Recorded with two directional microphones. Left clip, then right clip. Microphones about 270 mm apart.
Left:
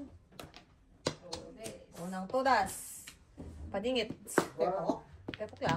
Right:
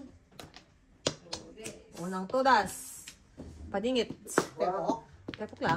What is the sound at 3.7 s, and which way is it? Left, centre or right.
Speech, right.